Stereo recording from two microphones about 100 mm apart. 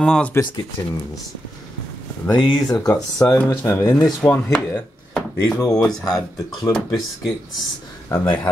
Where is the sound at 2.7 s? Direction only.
40° left (ahead or behind).